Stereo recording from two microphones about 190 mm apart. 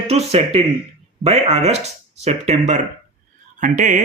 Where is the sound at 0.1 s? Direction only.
35° right (ahead or behind).